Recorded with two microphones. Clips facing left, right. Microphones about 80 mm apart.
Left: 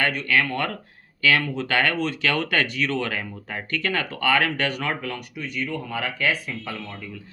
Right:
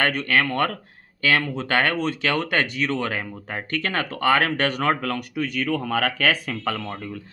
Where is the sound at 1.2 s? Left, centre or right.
Right.